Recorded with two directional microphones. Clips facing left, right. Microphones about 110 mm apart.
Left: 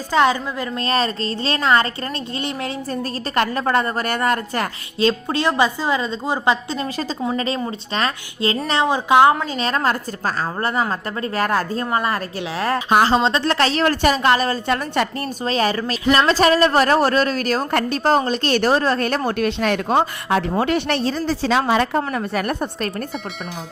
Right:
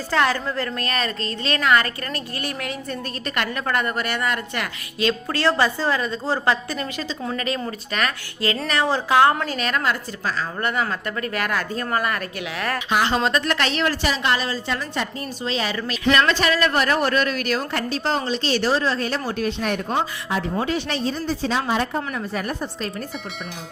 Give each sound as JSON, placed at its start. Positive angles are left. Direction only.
{"t": 0.1, "sound": "a woman's voice", "side_deg": 15}
{"t": 0.8, "sound": "a woman's voice", "side_deg": 30}
{"t": 5.3, "sound": "a woman's voice", "side_deg": 15}
{"t": 9.6, "sound": "a woman's voice", "side_deg": 30}
{"t": 13.9, "sound": "a woman's voice", "side_deg": 50}
{"t": 15.4, "sound": "a woman's voice", "side_deg": 45}